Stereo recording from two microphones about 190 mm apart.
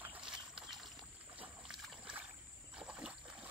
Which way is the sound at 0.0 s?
5° right (ahead or behind).